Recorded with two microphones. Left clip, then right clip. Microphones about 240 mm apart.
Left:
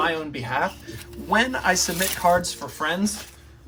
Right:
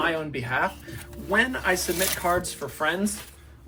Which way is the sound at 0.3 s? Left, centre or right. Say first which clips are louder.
Left 1 dB; centre.